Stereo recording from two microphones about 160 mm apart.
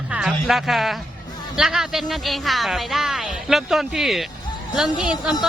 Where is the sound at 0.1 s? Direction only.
5° right (ahead or behind).